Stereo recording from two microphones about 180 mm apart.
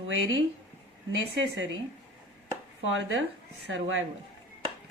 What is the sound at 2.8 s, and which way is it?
A woman's voice, 90° right.